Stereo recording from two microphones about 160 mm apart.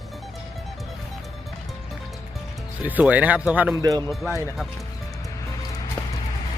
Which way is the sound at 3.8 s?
25° right (ahead or behind).